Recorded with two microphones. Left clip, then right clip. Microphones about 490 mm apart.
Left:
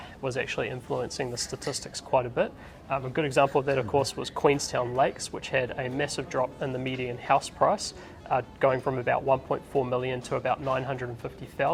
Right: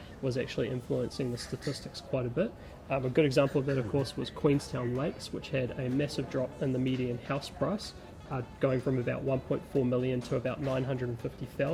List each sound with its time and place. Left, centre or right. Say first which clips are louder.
0.3 s speech: left 3 dB; left
2.9 s speech: left 1 dB; left
3.4 s speech: left 6 dB; left